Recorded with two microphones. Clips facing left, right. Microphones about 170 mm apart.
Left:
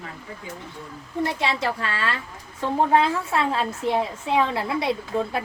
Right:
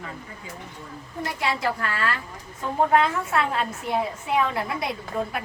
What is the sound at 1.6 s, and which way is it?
Speech, 25° left (ahead or behind).